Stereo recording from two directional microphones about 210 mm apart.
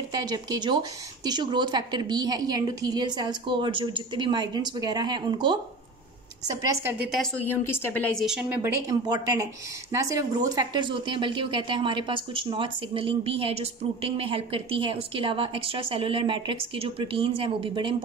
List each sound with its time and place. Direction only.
0.2 s a woman's voice: 20° right (ahead or behind)
8.5 s a woman's voice: 20° right (ahead or behind)